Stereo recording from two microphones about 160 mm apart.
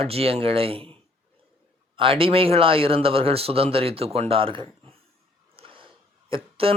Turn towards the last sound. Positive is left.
turn(degrees=-35)  # may be behind; listen again after turning